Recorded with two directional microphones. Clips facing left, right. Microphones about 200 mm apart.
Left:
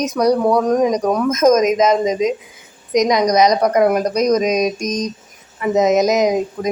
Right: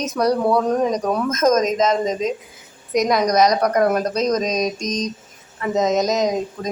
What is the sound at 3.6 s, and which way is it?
Speech, 20° left (ahead or behind).